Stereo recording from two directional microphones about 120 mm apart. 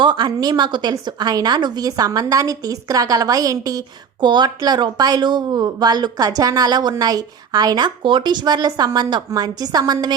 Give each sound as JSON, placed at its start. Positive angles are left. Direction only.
{"t": 0.0, "sound": "a woman's voice", "side_deg": -40}